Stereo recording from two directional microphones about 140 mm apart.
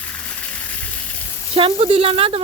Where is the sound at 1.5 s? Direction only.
40° right (ahead or behind).